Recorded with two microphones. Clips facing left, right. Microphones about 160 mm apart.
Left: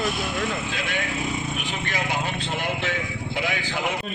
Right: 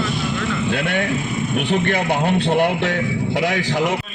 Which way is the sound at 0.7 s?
60° right (ahead or behind).